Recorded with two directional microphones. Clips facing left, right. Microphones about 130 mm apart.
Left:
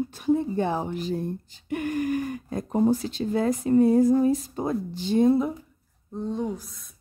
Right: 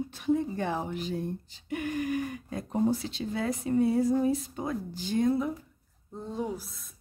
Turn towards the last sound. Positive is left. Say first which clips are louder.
# left 4 dB
turn(degrees=-5)  # may be behind; listen again after turning